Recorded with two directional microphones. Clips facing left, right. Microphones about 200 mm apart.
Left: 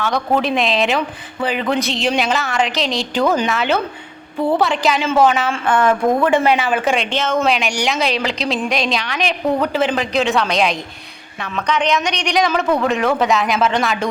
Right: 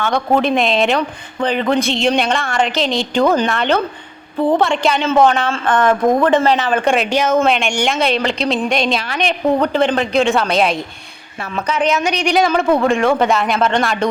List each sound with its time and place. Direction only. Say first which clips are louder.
0.3 s speech: right 3 dB; centre (ahead or behind)
6.0 s speech: right 2 dB; 20° right (ahead or behind)
6.2 s speech: right 1 dB; 10° left (ahead or behind); by 7.3 s 10° right (ahead or behind)
7.3 s speech: right 3 dB; centre (ahead or behind)